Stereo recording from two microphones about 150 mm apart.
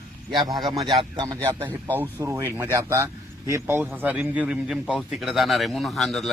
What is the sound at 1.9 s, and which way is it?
A man's voice, 15° right (ahead or behind).